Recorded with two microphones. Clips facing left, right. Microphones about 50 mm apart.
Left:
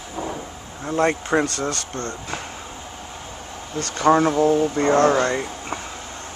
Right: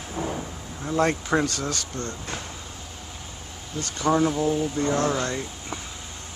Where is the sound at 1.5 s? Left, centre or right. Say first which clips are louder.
Left 4 dB; left.